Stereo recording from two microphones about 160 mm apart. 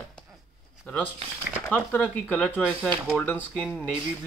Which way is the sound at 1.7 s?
10° left (ahead or behind).